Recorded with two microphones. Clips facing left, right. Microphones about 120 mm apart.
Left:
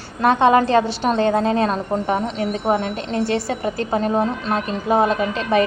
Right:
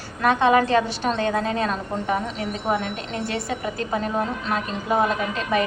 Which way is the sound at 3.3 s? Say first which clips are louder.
Left 5 dB; 30° left (ahead or behind).